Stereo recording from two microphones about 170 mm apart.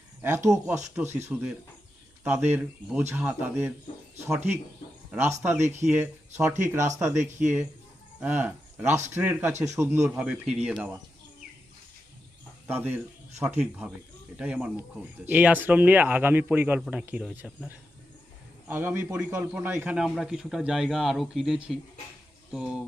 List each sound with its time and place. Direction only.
0.2 s speech: 15° right (ahead or behind)
5.5 s speech: 45° right (ahead or behind)
5.9 s speech: 15° right (ahead or behind)
7.2 s speech: 45° right (ahead or behind)
8.2 s speech: 10° right (ahead or behind)
12.6 s speech: 10° right (ahead or behind)
18.7 s speech: 15° right (ahead or behind)